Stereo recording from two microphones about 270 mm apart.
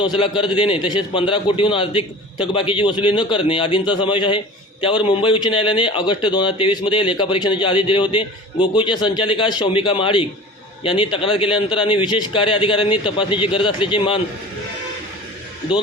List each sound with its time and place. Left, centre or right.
0.2 s a man's voice: centre